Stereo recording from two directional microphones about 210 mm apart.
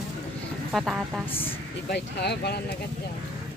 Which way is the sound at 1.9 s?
50° left (ahead or behind).